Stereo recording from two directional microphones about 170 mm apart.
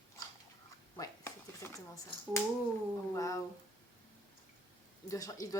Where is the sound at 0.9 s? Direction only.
20° left (ahead or behind).